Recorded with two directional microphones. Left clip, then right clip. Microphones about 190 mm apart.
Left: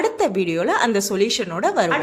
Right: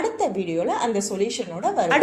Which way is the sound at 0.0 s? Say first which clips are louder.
Left 4 dB; 45° left (ahead or behind).